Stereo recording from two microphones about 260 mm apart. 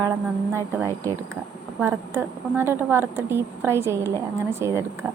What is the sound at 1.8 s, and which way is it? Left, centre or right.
A woman's voice, centre.